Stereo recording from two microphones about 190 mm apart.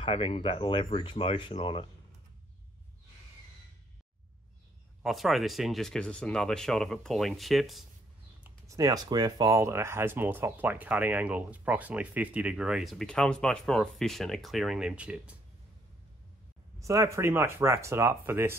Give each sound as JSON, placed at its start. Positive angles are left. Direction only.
{"t": 0.0, "sound": "speech", "side_deg": 30}
{"t": 5.0, "sound": "speech", "side_deg": 0}
{"t": 8.5, "sound": "speech", "side_deg": -15}
{"t": 16.8, "sound": "speech", "side_deg": -15}